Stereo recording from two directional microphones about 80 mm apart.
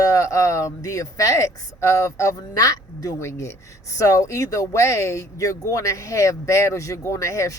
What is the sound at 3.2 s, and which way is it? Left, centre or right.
Speech, left.